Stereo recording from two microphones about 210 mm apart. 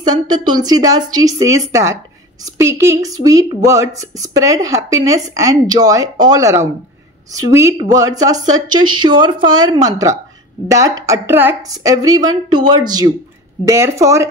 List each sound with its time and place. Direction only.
0.0 s a woman's voice: 20° right (ahead or behind)